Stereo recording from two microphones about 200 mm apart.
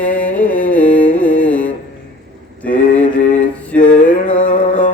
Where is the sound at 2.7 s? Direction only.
40° left (ahead or behind).